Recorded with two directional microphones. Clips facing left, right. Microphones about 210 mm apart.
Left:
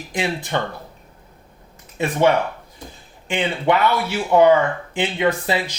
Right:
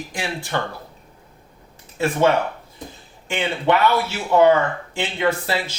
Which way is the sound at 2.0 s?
20° left (ahead or behind).